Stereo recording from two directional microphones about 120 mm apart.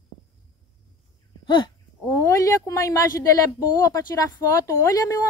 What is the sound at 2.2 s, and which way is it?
Speech, 25° left (ahead or behind).